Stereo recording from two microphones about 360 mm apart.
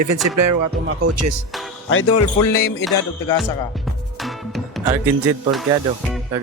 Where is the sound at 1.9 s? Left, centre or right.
Left.